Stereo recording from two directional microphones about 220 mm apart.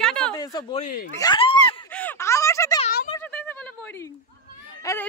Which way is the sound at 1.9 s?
10° left (ahead or behind).